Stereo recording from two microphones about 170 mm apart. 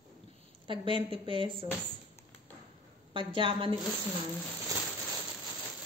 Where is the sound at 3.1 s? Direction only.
30° right (ahead or behind).